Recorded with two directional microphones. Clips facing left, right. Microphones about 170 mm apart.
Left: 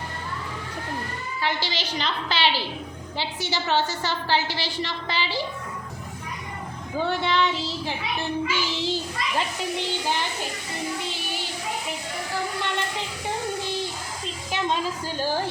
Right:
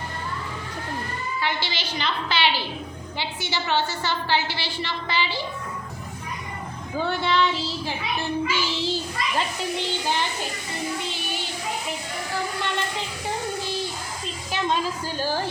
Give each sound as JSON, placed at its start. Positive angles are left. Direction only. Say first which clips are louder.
{"t": 1.4, "sound": "a woman's voice", "louder": "left 2 dB", "side_deg": 40}
{"t": 6.9, "sound": "a child's voice", "louder": "even", "side_deg": 20}
{"t": 14.5, "sound": "a child's voice", "louder": "right 1 dB", "side_deg": 20}